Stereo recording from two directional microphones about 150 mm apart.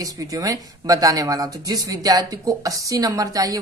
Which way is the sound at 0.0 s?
25° right (ahead or behind).